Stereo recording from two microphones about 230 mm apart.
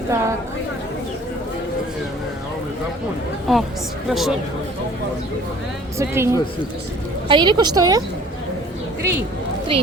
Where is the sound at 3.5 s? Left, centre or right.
Centre.